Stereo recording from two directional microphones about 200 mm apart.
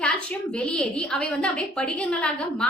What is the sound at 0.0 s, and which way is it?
A woman's voice, 5° left (ahead or behind).